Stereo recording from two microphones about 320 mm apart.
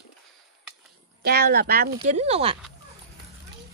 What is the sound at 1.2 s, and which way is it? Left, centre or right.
Speech, right.